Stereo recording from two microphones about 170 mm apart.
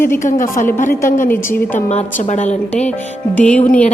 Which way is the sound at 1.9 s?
40° left (ahead or behind).